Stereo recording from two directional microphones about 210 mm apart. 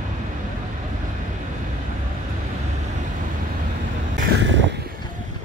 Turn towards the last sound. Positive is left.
turn(degrees=-55)  # may be behind; listen again after turning